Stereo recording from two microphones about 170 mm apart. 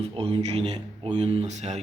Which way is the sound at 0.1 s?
35° right (ahead or behind).